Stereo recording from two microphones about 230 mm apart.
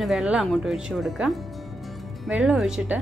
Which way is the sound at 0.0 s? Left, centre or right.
Centre.